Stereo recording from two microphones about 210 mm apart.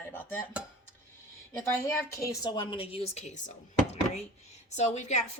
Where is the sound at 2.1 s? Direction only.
15° left (ahead or behind).